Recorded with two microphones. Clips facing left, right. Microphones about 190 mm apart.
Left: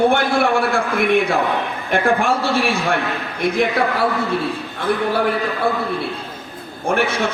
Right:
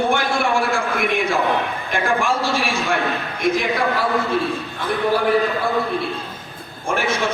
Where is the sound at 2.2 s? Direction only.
60° left (ahead or behind).